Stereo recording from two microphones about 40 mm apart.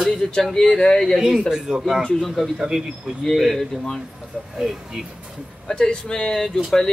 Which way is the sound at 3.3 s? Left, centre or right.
Centre.